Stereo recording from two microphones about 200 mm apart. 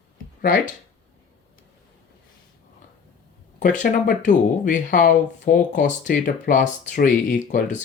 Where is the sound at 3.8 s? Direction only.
40° left (ahead or behind).